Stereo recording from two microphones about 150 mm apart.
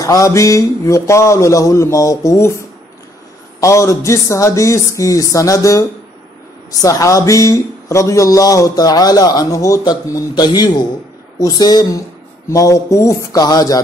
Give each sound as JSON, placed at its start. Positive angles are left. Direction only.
{"t": 0.0, "sound": "a man's voice", "side_deg": 25}
{"t": 3.6, "sound": "a man's voice", "side_deg": 20}